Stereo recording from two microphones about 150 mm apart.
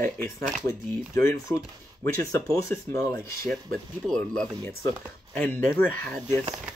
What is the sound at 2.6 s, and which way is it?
Speech, 20° left (ahead or behind).